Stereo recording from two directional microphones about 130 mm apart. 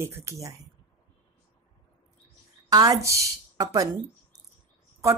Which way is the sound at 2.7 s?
25° right (ahead or behind).